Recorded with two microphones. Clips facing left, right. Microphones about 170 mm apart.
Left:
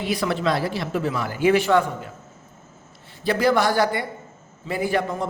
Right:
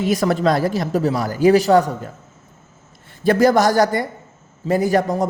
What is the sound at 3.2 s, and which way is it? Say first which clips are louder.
A man's voice: right 5 dB; 45° right (ahead or behind).